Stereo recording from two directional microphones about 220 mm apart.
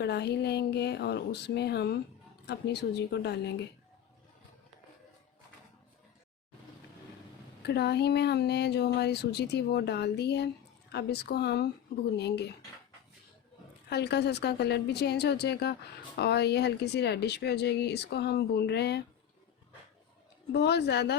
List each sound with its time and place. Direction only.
0.0 s a woman's voice: 50° left (ahead or behind)
7.6 s a woman's voice: 50° left (ahead or behind)
13.9 s a woman's voice: 50° left (ahead or behind)
20.5 s a woman's voice: 50° left (ahead or behind)